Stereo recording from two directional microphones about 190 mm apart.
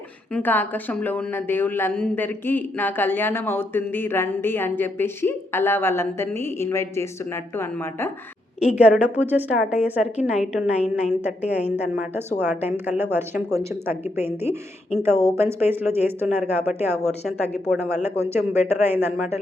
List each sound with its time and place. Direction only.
0.3 s a woman's voice: 10° left (ahead or behind)
8.6 s a woman's voice: 5° right (ahead or behind)
17.7 s speech: 35° left (ahead or behind)
18.0 s a woman's voice: 10° right (ahead or behind)